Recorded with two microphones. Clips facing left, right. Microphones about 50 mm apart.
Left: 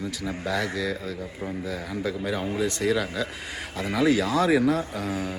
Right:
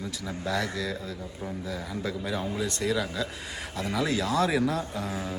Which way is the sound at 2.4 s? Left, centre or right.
Left.